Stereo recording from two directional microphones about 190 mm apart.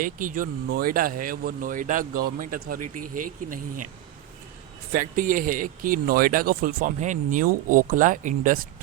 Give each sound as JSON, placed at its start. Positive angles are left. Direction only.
{"t": 0.0, "sound": "speech", "side_deg": -45}
{"t": 4.9, "sound": "speech", "side_deg": -45}